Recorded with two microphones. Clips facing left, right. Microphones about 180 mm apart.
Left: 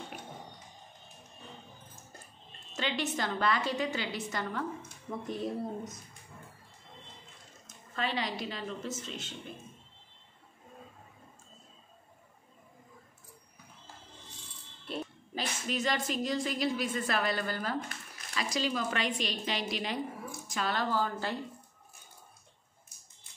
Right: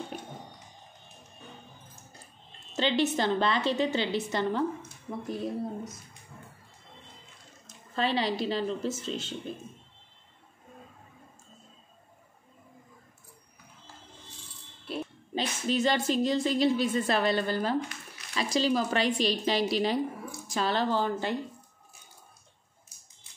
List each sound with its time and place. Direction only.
2.7 s a woman's voice: 25° right (ahead or behind)
5.2 s speech: centre (ahead or behind)
7.6 s speech: 30° right (ahead or behind)
14.9 s a sound: 5° right (ahead or behind)
15.3 s a woman's voice: 30° right (ahead or behind)